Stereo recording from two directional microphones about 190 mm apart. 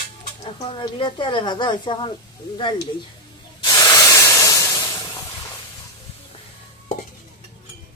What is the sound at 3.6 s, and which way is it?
Spray, 20° left (ahead or behind).